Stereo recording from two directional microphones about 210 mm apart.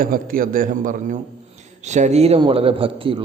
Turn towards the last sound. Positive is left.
turn(degrees=-25)  # may be behind; listen again after turning